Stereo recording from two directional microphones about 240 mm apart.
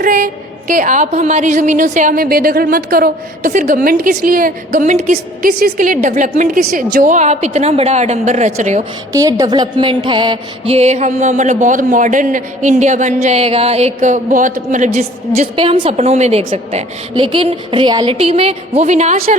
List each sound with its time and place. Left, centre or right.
0.0 s a woman's voice: right
9.1 s music: centre; by 19.4 s right